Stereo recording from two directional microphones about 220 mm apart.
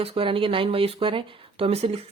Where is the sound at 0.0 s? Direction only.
25° right (ahead or behind).